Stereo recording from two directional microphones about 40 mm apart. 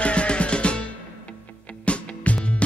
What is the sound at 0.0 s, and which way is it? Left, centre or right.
Music, left.